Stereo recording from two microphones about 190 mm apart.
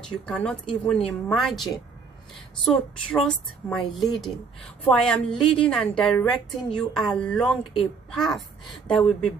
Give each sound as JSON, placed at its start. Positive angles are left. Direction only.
{"t": 0.0, "sound": "a woman's voice", "side_deg": 5}